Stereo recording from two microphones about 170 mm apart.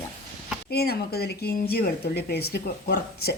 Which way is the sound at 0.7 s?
70° left (ahead or behind).